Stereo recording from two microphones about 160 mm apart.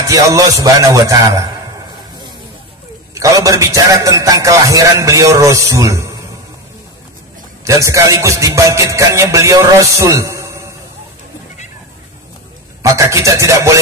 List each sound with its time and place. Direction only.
0.1 s music: 20° right (ahead or behind)
3.2 s music: 20° right (ahead or behind)
7.6 s music: 20° right (ahead or behind)
12.8 s music: 20° right (ahead or behind)